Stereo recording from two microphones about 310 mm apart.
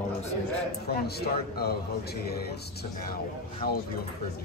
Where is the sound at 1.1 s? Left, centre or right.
Left.